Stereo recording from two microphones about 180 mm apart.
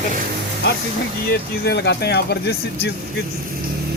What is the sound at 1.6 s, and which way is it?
Speech, 65° left (ahead or behind).